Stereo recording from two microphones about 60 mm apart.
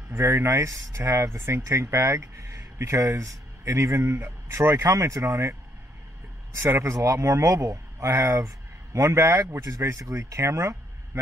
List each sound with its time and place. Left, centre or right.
0.1 s speech: right